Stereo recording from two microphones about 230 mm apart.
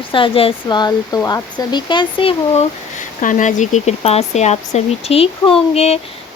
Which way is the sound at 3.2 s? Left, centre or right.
Left.